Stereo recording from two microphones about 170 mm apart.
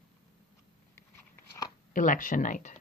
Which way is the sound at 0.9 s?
20° left (ahead or behind).